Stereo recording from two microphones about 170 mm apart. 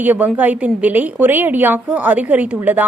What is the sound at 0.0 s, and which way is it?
A woman's voice, 10° right (ahead or behind).